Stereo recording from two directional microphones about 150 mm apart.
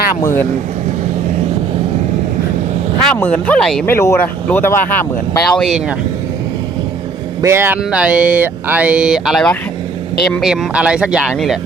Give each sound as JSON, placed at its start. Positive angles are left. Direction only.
{"t": 0.2, "sound": "speech", "side_deg": 15}
{"t": 3.0, "sound": "speech", "side_deg": 10}
{"t": 3.8, "sound": "speech", "side_deg": 15}
{"t": 7.4, "sound": "speech", "side_deg": -15}